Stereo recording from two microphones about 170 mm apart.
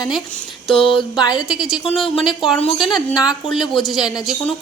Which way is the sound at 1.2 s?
25° left (ahead or behind).